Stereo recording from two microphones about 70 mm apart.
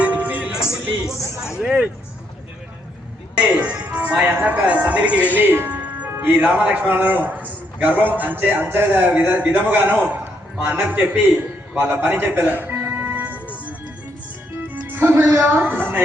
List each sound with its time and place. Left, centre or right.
0.0 s music: right
1.0 s speech: centre
3.3 s a man's voice: centre
5.1 s speech: left
5.4 s music: right
6.2 s a man's voice: right
11.9 s music: right
14.8 s a man's voice: right